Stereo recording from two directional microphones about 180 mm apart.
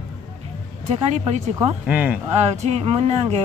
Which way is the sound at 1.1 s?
40° right (ahead or behind).